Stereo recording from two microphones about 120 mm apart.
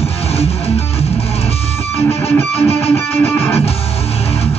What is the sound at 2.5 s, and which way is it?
Music, 60° left (ahead or behind).